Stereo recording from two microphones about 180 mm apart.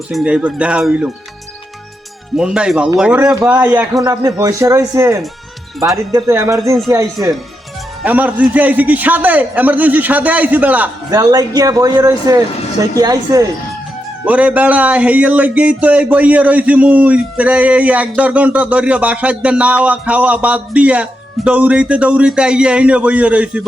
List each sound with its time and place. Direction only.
0.1 s speech: centre (ahead or behind)
2.3 s speech: 5° right (ahead or behind)
4.1 s speech: 20° right (ahead or behind)
11.1 s a man's voice: 20° right (ahead or behind)
14.3 s speech: 10° right (ahead or behind)